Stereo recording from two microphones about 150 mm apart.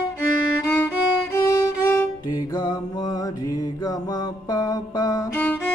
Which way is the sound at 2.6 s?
25° left (ahead or behind).